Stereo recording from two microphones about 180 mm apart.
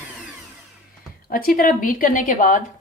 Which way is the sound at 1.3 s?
55° left (ahead or behind).